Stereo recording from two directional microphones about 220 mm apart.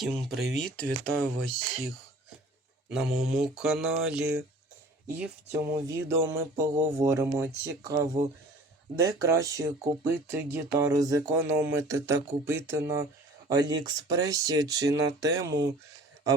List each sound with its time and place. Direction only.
0.0 s speech: centre (ahead or behind)